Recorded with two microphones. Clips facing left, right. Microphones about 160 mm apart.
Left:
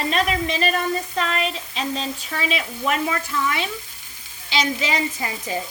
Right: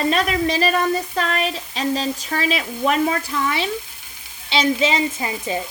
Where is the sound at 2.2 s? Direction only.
40° right (ahead or behind).